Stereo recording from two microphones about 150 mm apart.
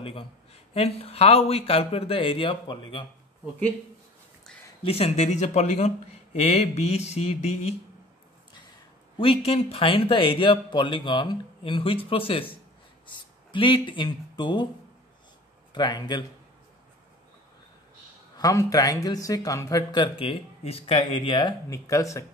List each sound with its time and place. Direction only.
0.0 s speech: 35° left (ahead or behind)
4.8 s speech: 40° left (ahead or behind)
9.2 s speech: 40° left (ahead or behind)
15.7 s speech: 30° left (ahead or behind)
18.4 s speech: 25° left (ahead or behind)